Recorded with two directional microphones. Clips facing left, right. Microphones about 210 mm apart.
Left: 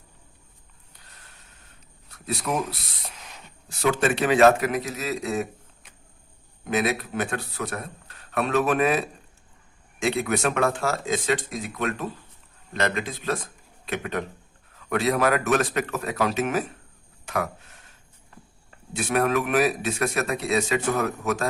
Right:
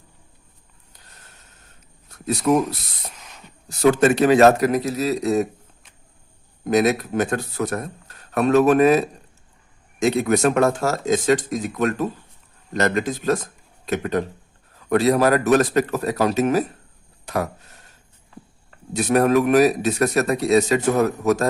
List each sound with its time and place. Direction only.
2.0 s a man's voice: 45° right (ahead or behind)
6.7 s a man's voice: 40° right (ahead or behind)
18.9 s a man's voice: 40° right (ahead or behind)